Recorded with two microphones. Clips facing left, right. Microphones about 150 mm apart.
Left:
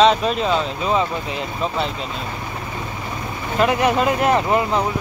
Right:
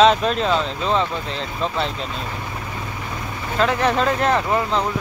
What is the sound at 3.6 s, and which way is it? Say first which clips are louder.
Speech: left 2 dB; 15° left (ahead or behind).